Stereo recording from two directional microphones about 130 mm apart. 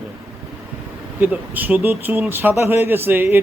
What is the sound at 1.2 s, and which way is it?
A man's voice, 15° right (ahead or behind).